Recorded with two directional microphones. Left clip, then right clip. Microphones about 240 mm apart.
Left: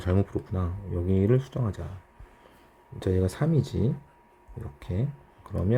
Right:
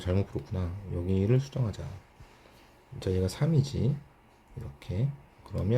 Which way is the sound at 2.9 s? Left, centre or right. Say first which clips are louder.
Left 3 dB; centre.